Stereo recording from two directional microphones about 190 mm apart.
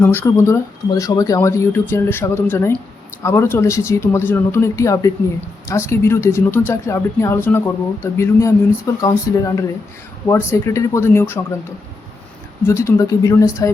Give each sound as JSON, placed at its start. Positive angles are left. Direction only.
{"t": 0.0, "sound": "speech", "side_deg": 10}
{"t": 12.6, "sound": "speech", "side_deg": 15}